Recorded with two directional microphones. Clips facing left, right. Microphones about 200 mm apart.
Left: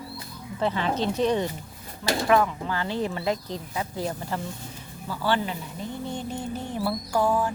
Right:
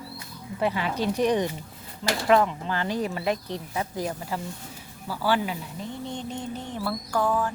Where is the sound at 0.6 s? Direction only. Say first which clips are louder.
Left 1 dB; 10° right (ahead or behind).